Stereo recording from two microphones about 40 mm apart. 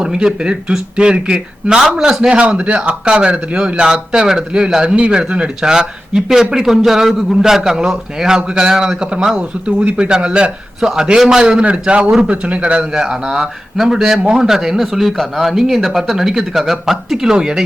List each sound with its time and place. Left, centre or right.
0.0 s a man's voice: right
9.6 s a man's voice: right
10.8 s speech: centre
11.6 s a man's voice: right
12.9 s speech: centre